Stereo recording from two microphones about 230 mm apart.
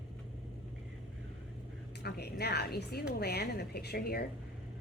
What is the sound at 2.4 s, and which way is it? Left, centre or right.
A woman's voice, left.